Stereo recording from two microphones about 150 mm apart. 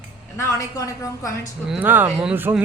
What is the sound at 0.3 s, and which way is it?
Speech, 20° left (ahead or behind).